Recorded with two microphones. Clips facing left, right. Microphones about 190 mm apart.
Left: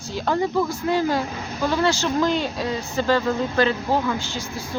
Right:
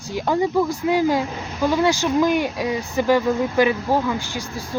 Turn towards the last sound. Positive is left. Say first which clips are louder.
# right 1 dB
turn(degrees=-15)  # may be behind; listen again after turning